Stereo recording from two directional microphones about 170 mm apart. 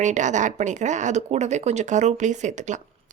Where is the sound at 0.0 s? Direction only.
45° right (ahead or behind).